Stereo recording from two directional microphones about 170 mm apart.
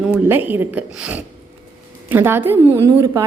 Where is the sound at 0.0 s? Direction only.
10° right (ahead or behind).